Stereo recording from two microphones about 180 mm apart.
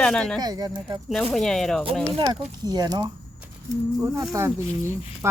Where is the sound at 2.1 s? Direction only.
25° right (ahead or behind).